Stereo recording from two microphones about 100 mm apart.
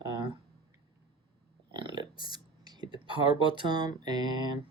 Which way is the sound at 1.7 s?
50° right (ahead or behind).